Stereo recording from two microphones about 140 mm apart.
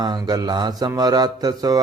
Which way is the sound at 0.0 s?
30° right (ahead or behind).